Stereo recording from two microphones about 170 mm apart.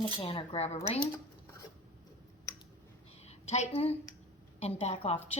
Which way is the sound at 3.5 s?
40° left (ahead or behind).